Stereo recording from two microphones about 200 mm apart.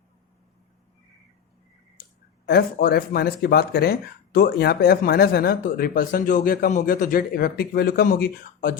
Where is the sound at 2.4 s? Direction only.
50° left (ahead or behind).